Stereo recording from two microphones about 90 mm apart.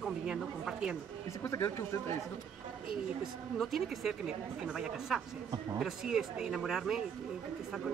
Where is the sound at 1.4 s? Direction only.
35° left (ahead or behind).